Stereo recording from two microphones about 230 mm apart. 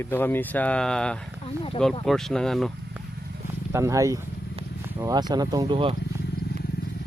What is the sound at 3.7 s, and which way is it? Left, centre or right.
Speech, centre.